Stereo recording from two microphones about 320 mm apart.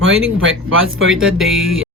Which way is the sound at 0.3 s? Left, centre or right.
Right.